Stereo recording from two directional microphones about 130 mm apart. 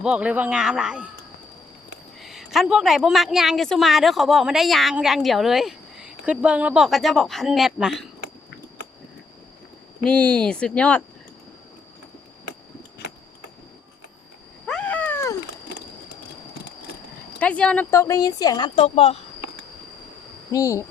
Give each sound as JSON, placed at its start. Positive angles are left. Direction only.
{"t": 0.0, "sound": "speech", "side_deg": -10}
{"t": 2.2, "sound": "a woman's voice", "side_deg": 0}
{"t": 10.0, "sound": "speech", "side_deg": 10}
{"t": 14.7, "sound": "cat", "side_deg": 10}
{"t": 17.4, "sound": "speech", "side_deg": 10}
{"t": 17.9, "sound": "speech", "side_deg": 25}
{"t": 18.8, "sound": "speech", "side_deg": 50}
{"t": 20.5, "sound": "speech", "side_deg": 25}